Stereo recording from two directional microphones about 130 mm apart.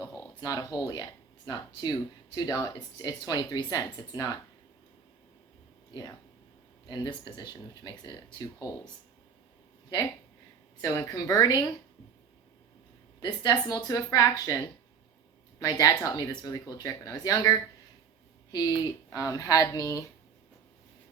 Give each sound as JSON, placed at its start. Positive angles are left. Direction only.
{"t": 0.3, "sound": "speech", "side_deg": 30}
{"t": 6.8, "sound": "speech", "side_deg": 30}
{"t": 10.8, "sound": "speech", "side_deg": 25}
{"t": 13.1, "sound": "a woman's voice", "side_deg": 35}